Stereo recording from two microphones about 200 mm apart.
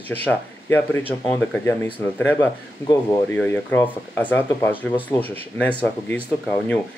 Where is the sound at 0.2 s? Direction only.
10° left (ahead or behind).